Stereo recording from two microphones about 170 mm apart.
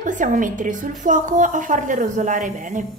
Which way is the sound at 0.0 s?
50° right (ahead or behind).